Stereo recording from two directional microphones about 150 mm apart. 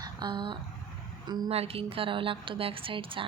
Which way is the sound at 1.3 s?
40° right (ahead or behind).